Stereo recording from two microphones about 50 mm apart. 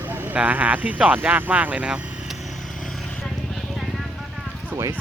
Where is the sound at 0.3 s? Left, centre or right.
Right.